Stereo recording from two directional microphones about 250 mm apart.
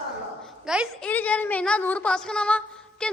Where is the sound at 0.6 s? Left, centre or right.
Centre.